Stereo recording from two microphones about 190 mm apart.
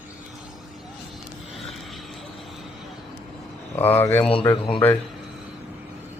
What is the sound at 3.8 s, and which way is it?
Speech, 10° left (ahead or behind).